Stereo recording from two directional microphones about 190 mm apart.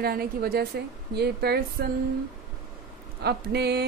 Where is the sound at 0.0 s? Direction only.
50° right (ahead or behind).